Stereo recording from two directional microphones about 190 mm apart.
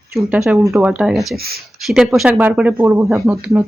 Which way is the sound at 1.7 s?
Centre (ahead or behind).